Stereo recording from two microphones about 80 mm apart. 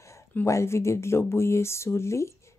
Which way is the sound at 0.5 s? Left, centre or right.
Left.